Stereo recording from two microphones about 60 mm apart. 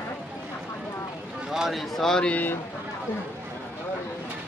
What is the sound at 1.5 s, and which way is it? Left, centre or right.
Speech, centre.